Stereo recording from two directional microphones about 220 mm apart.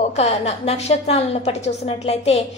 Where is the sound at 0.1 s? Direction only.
30° left (ahead or behind).